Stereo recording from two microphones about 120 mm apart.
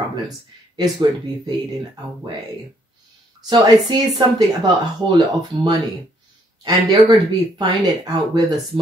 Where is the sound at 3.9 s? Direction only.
35° right (ahead or behind).